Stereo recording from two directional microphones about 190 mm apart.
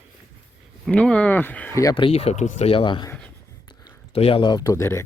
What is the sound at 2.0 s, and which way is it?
Speech, 30° left (ahead or behind).